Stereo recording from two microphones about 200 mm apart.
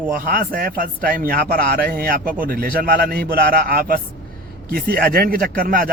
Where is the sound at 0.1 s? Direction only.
45° right (ahead or behind).